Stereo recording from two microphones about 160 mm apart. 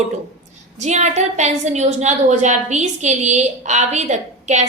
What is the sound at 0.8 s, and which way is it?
A woman's voice, 45° right (ahead or behind).